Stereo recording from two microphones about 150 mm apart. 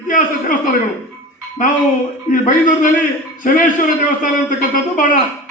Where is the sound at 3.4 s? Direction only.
65° left (ahead or behind).